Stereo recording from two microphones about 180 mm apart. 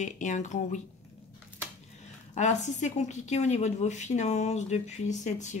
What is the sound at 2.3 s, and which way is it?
A woman's voice, 40° left (ahead or behind).